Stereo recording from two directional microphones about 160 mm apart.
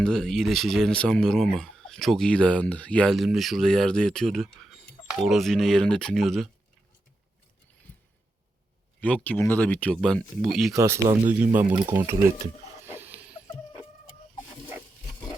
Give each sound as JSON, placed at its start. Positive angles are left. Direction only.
{"t": 0.0, "sound": "speech", "side_deg": 5}
{"t": 9.0, "sound": "speech", "side_deg": 10}
{"t": 10.8, "sound": "speech", "side_deg": -20}
{"t": 11.3, "sound": "speech", "side_deg": -5}
{"t": 12.8, "sound": "a sound", "side_deg": -15}